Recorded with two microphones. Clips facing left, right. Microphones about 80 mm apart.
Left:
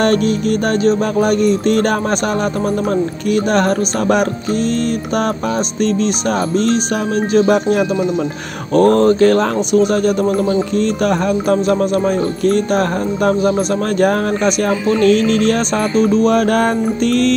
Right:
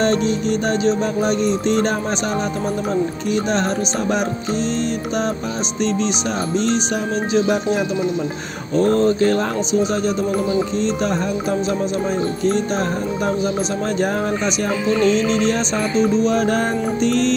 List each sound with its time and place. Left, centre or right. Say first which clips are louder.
0.0 s speech: left 4 dB; left
3.5 s speech: left 5 dB; left
7.3 s speech: left 5 dB; left
8.7 s speech: left 5 dB; left
16.0 s music: left 4 dB; left